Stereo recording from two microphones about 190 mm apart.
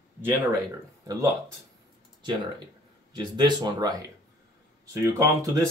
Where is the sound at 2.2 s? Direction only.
25° right (ahead or behind).